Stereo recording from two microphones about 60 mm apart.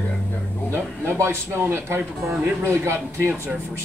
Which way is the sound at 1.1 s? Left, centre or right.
Right.